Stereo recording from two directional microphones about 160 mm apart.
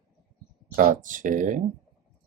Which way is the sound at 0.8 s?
55° right (ahead or behind).